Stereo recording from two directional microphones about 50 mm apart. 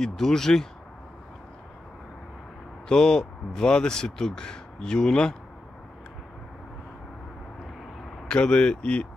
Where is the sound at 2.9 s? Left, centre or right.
Centre.